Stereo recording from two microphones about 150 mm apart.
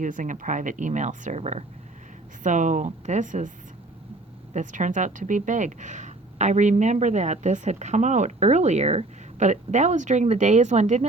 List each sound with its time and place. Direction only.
0.0 s speech: 60° right (ahead or behind)
4.5 s speech: 55° right (ahead or behind)